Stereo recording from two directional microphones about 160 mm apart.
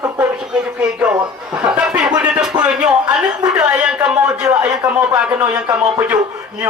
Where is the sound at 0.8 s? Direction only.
10° right (ahead or behind).